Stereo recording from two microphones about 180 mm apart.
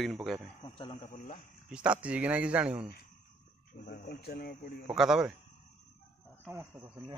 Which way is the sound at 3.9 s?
55° left (ahead or behind).